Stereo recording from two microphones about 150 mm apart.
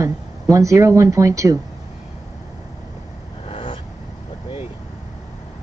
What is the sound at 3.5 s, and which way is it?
Vehicle, 35° left (ahead or behind).